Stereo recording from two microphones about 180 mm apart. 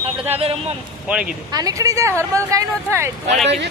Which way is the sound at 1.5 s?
20° right (ahead or behind).